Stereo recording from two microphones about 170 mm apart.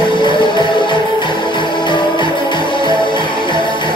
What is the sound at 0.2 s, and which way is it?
Music, 25° left (ahead or behind).